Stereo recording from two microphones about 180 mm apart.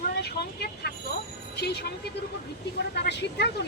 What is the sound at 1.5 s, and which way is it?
Speech, 65° left (ahead or behind).